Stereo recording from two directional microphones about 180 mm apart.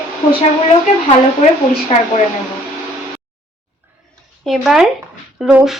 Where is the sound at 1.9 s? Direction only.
35° left (ahead or behind).